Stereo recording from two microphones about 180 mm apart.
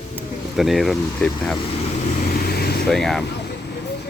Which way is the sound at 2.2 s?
55° left (ahead or behind).